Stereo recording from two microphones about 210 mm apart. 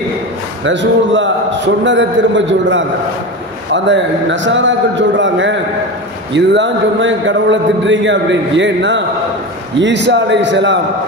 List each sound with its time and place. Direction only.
0.7 s a man's voice: 60° right (ahead or behind)